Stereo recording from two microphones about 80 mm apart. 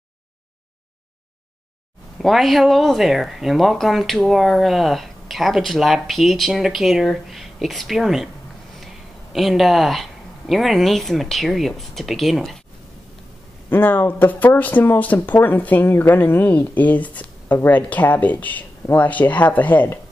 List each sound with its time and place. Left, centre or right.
2.1 s speech: centre
9.3 s speech: centre
13.7 s speech: left